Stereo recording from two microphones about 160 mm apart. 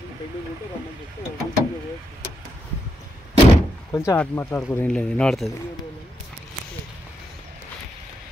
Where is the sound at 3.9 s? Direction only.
10° left (ahead or behind).